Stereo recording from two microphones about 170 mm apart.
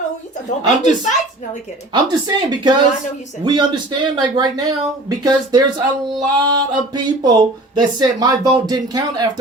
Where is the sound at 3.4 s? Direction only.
25° right (ahead or behind).